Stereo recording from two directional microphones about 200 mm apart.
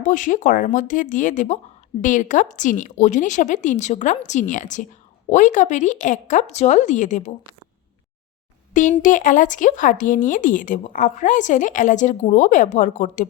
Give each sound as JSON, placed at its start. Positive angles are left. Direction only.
{"t": 0.0, "sound": "speech", "side_deg": 40}
{"t": 8.7, "sound": "speech", "side_deg": 40}